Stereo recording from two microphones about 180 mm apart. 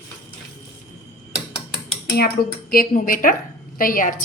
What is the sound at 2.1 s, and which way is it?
A woman's voice, 60° left (ahead or behind).